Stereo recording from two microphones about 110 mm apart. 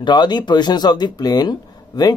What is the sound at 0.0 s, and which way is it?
Speech, 40° left (ahead or behind).